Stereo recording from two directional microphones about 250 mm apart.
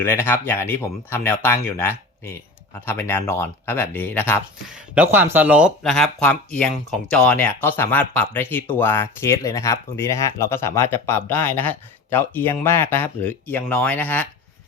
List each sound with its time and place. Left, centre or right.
0.0 s speech: centre
4.7 s speech: centre